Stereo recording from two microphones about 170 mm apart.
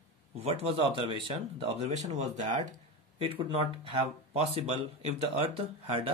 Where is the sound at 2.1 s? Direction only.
40° right (ahead or behind).